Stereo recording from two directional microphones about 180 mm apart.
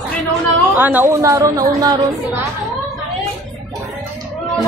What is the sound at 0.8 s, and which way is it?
A woman's voice, 10° right (ahead or behind).